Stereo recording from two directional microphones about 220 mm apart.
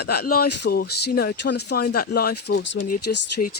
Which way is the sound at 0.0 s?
45° left (ahead or behind).